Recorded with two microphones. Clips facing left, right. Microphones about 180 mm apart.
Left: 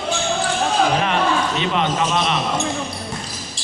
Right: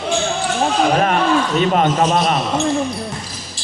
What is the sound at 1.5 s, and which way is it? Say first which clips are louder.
Speech: right 5 dB; 45° right (ahead or behind).